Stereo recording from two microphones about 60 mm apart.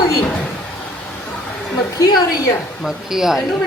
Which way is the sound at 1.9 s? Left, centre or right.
Left.